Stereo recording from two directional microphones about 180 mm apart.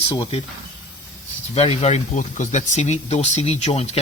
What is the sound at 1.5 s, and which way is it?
Speech, 35° left (ahead or behind).